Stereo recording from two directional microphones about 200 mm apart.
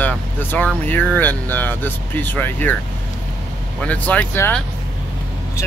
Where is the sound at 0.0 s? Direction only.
10° left (ahead or behind).